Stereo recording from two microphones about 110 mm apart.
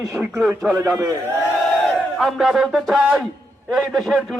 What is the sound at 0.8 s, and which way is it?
Speech, 30° right (ahead or behind).